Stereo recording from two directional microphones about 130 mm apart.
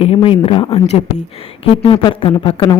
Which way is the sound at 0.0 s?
45° left (ahead or behind).